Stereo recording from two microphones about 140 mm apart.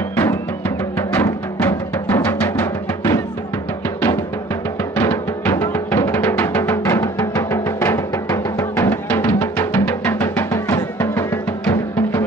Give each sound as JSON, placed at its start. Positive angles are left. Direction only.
{"t": 0.1, "sound": "music", "side_deg": 15}
{"t": 4.9, "sound": "music", "side_deg": 15}